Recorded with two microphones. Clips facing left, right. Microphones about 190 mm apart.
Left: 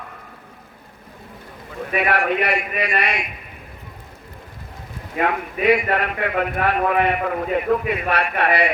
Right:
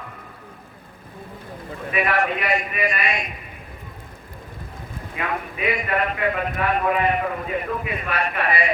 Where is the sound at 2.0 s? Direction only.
70° left (ahead or behind).